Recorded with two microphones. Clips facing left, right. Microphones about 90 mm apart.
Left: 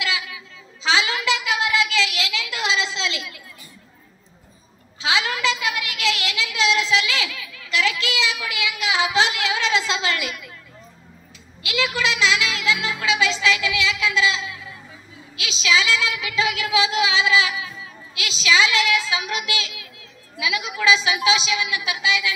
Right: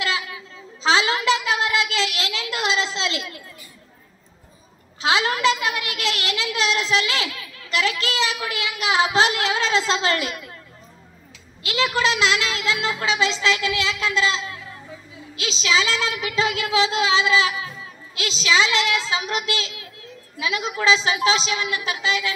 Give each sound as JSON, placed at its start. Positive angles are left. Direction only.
{"t": 0.0, "sound": "a sound", "side_deg": -35}
{"t": 5.0, "sound": "a woman's voice", "side_deg": -35}
{"t": 11.6, "sound": "a woman's voice", "side_deg": -35}